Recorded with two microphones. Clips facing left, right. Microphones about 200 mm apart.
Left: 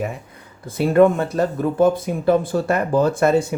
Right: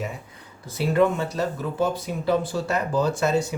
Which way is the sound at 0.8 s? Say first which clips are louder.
Left 6 dB; 50° left (ahead or behind).